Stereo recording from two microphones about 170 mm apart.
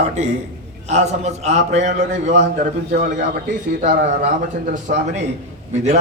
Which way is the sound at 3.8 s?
65° right (ahead or behind).